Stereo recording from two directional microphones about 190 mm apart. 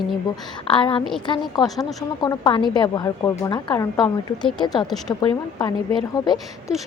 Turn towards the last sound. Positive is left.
turn(degrees=20)  # may be behind; listen again after turning